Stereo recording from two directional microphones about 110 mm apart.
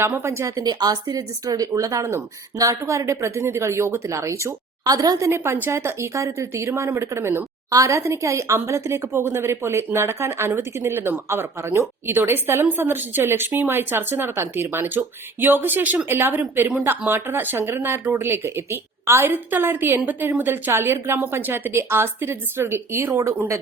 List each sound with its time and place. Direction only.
0.0 s a woman's voice: 20° right (ahead or behind)
5.3 s a woman's voice: 20° right (ahead or behind)